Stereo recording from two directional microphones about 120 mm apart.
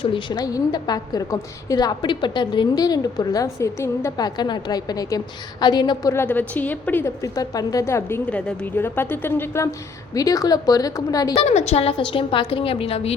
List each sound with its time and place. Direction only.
0.0 s a woman's voice: 45° left (ahead or behind); by 4.3 s 25° left (ahead or behind)
4.4 s a woman's voice: 40° left (ahead or behind)
6.2 s a woman's voice: 15° left (ahead or behind)
7.2 s a woman's voice: 30° left (ahead or behind)
8.3 s a woman's voice: 10° left (ahead or behind)
10.2 s a woman's voice: 30° left (ahead or behind)
11.3 s a woman's voice: 65° left (ahead or behind)